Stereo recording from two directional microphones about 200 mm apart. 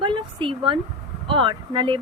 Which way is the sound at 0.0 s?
25° right (ahead or behind).